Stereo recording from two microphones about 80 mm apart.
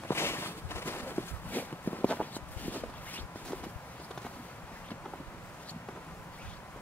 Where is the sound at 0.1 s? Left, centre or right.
Left.